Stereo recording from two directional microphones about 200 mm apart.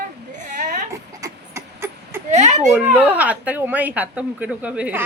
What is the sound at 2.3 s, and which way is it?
Speech, 35° right (ahead or behind).